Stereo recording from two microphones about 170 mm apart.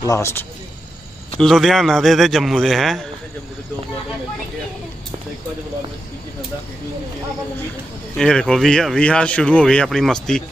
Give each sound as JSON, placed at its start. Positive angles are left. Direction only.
{"t": 0.0, "sound": "speech", "side_deg": 20}
{"t": 1.4, "sound": "speech", "side_deg": 0}
{"t": 8.2, "sound": "speech", "side_deg": 5}